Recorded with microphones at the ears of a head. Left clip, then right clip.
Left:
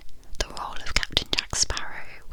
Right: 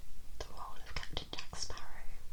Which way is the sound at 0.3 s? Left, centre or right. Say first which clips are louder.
Left 16 dB; left.